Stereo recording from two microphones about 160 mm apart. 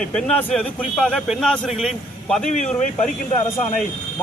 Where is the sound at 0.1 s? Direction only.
5° left (ahead or behind).